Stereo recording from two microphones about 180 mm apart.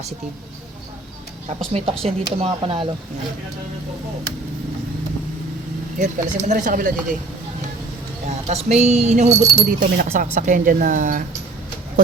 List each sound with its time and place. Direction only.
1.7 s speech: 35° right (ahead or behind)
6.0 s speech: 45° right (ahead or behind)
8.4 s speech: 40° right (ahead or behind)